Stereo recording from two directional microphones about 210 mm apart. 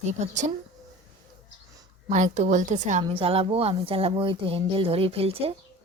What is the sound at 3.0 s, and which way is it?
Speech, 25° right (ahead or behind).